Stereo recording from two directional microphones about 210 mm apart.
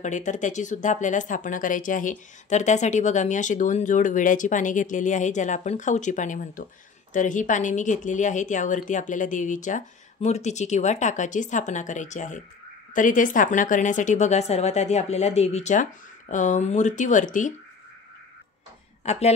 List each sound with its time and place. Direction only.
0.0 s speech: 35° left (ahead or behind)
19.0 s speech: 30° left (ahead or behind)